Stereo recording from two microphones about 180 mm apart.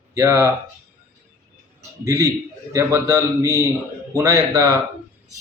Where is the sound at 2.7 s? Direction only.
15° right (ahead or behind).